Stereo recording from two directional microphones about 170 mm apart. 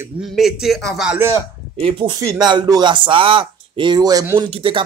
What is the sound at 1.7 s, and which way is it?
Speech, 30° right (ahead or behind).